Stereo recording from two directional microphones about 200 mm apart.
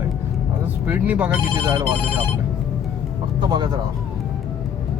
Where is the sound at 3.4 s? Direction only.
20° right (ahead or behind).